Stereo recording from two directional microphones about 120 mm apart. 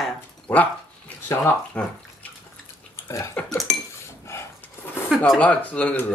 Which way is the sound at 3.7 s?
5° left (ahead or behind).